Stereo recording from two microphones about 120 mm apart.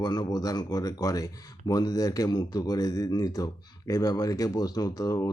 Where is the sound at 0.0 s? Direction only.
35° left (ahead or behind).